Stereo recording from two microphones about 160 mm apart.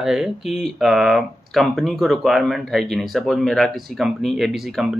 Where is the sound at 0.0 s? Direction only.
5° right (ahead or behind).